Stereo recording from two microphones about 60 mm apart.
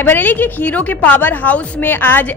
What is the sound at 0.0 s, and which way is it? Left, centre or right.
A woman's voice, left.